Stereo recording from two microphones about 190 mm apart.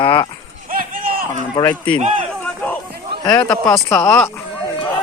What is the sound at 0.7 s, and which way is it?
Run, 50° right (ahead or behind).